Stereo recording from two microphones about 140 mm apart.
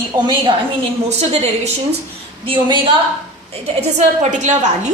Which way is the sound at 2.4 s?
35° right (ahead or behind).